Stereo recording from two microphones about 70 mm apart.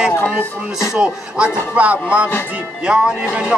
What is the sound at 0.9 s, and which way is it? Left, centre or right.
A man's voice, centre.